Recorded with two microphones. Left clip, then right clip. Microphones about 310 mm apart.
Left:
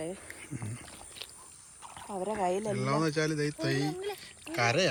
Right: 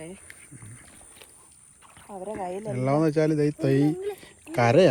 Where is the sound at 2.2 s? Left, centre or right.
Left.